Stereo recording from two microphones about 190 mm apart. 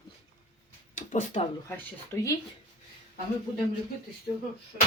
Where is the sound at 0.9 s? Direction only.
40° left (ahead or behind).